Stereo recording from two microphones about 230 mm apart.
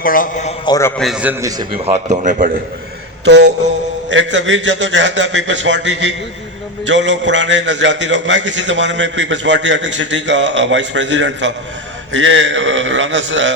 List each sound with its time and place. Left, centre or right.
0.0 s a man's voice: left
0.6 s a man's voice: centre
1.0 s a man's voice: centre
1.8 s speech: right
3.2 s a man's voice: right